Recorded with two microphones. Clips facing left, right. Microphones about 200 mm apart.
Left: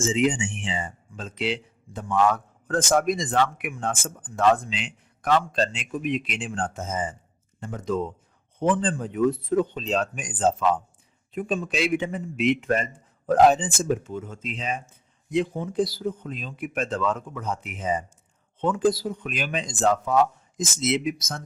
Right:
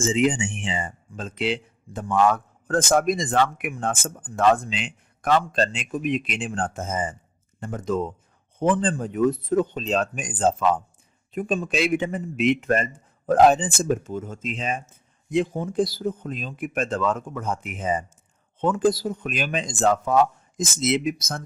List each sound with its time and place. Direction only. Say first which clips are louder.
0.0 s speech: right 1 dB; 50° right (ahead or behind)